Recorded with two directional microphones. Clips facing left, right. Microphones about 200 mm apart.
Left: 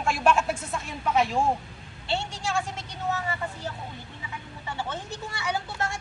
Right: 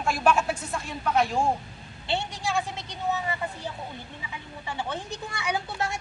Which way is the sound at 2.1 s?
15° right (ahead or behind).